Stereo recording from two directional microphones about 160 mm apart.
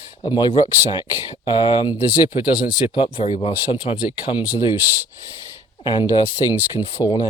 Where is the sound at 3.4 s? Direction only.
35° left (ahead or behind).